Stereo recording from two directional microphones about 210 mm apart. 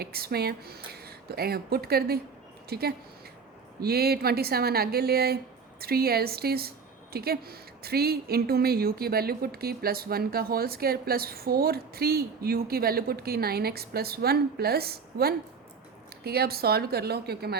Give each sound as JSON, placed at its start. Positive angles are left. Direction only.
{"t": 0.0, "sound": "a woman's voice", "side_deg": -50}